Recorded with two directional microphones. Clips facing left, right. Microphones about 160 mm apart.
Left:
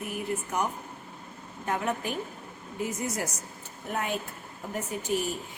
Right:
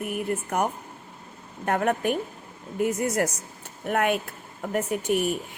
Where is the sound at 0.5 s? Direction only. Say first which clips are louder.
Right 4 dB; 55° right (ahead or behind).